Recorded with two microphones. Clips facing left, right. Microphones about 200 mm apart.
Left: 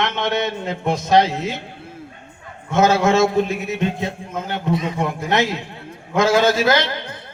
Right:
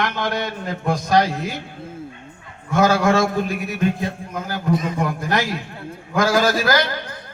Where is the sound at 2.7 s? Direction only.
25° left (ahead or behind).